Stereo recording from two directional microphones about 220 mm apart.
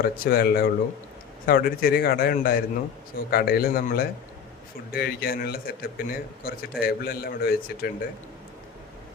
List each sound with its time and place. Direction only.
0.0 s a man's voice: 40° left (ahead or behind)